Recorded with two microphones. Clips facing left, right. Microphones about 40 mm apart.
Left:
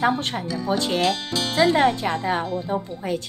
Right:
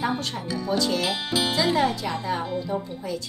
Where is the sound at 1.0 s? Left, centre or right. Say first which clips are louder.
Left 2 dB; centre.